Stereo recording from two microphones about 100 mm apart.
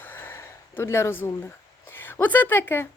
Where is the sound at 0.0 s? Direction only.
20° left (ahead or behind).